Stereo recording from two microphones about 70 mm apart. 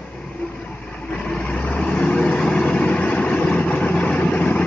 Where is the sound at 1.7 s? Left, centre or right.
Left.